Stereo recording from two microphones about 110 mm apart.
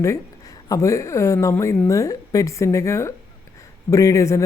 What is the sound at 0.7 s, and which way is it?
Speech, 30° left (ahead or behind).